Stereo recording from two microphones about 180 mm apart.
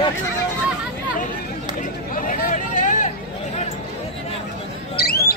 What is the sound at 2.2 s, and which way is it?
Vehicle, 50° left (ahead or behind).